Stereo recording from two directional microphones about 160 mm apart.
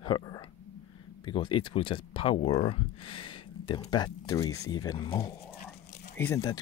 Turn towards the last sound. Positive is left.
turn(degrees=15)  # may be behind; listen again after turning